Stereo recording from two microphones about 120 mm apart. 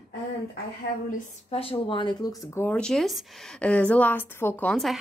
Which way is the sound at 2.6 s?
10° left (ahead or behind).